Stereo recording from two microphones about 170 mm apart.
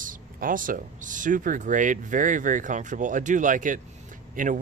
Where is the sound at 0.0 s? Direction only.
55° right (ahead or behind).